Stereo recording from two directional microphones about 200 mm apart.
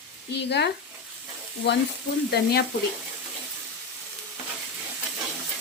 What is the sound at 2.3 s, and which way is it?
Speech, 55° left (ahead or behind).